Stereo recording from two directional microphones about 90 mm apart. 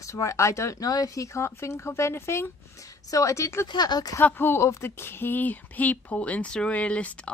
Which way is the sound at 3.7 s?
50° left (ahead or behind).